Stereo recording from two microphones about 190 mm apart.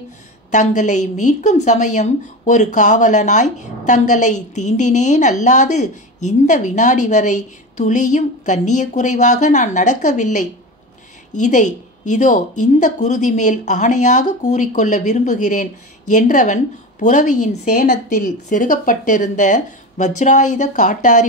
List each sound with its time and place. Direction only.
0.5 s a woman's voice: 40° left (ahead or behind)
11.4 s a woman's voice: 40° left (ahead or behind)